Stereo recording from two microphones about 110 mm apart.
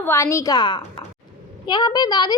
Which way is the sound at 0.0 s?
25° left (ahead or behind).